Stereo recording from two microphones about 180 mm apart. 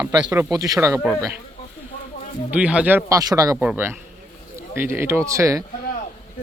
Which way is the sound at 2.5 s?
5° right (ahead or behind).